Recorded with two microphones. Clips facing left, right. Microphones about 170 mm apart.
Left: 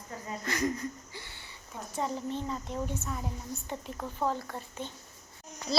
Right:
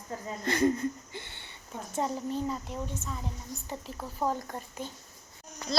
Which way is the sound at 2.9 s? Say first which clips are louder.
Left 2 dB; 10° left (ahead or behind).